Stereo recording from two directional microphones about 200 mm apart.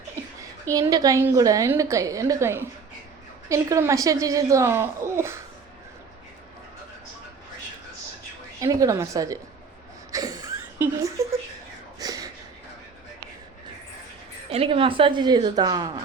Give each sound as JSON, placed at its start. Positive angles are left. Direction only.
{"t": 0.7, "sound": "a woman's voice", "side_deg": -20}
{"t": 8.6, "sound": "a woman's voice", "side_deg": -15}
{"t": 10.1, "sound": "a sound", "side_deg": -15}
{"t": 14.5, "sound": "a woman's voice", "side_deg": -30}